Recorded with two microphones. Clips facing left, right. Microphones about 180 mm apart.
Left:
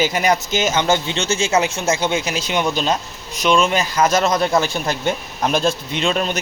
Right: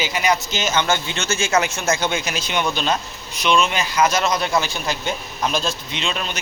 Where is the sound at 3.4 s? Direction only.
45° left (ahead or behind).